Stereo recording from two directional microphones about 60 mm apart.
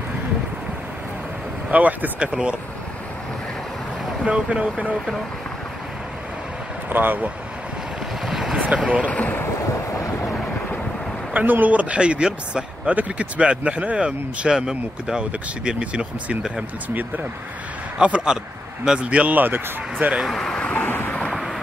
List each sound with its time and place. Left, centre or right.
1.7 s speech: right
4.2 s speech: centre
6.9 s speech: right
8.3 s boat: centre
8.5 s speech: centre
9.0 s speech: left
11.3 s speech: right; by 16.6 s centre
17.9 s speech: centre
20.2 s speech: centre
20.7 s vehicle: left